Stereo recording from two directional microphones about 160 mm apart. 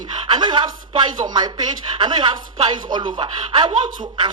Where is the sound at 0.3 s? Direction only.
30° right (ahead or behind).